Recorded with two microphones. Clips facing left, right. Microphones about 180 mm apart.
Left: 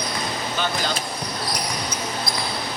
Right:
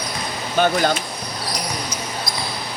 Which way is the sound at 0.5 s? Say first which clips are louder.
Right 10 dB; 50° right (ahead or behind).